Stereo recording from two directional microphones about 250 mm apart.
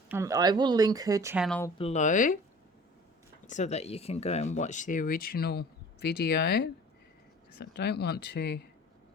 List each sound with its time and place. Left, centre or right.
0.1 s speech: centre
1.5 s speech: centre
1.8 s speech: left
3.4 s speech: left